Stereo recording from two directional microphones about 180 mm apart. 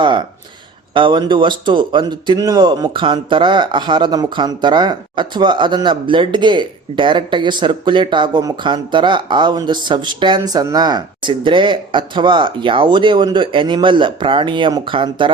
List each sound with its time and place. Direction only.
0.0 s speech: 25° right (ahead or behind)